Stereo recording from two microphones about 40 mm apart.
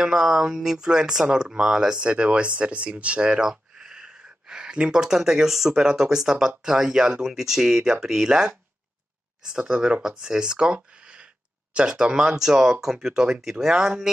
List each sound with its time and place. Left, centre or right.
0.0 s speech: centre
2.0 s speech: right
3.3 s a sound: centre
5.0 s speech: centre
9.7 s speech: right
12.2 s speech: centre